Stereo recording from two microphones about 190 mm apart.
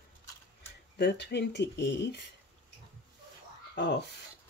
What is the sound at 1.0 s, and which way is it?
Speech, 60° left (ahead or behind).